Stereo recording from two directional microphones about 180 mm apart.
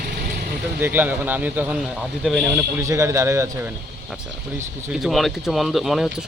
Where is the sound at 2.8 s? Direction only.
15° right (ahead or behind).